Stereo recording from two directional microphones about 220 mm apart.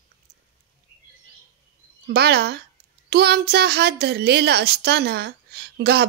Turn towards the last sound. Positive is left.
turn(degrees=-50)  # may be behind; listen again after turning